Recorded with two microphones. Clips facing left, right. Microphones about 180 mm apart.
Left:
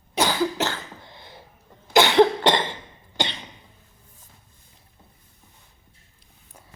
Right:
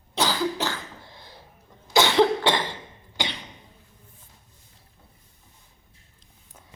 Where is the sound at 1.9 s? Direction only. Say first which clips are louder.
Left 3 dB; 20° left (ahead or behind).